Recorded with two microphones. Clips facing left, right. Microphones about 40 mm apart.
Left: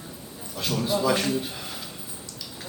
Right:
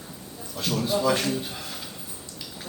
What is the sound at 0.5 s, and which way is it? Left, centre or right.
A man's voice, centre.